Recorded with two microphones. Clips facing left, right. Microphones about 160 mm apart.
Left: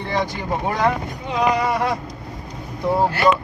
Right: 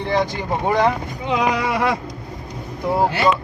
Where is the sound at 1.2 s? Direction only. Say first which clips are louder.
Even; 90° right.